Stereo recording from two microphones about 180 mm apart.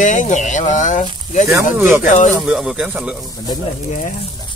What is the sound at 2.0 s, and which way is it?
Speech, 45° left (ahead or behind).